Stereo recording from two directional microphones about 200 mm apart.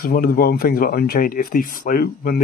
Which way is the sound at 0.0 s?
45° left (ahead or behind).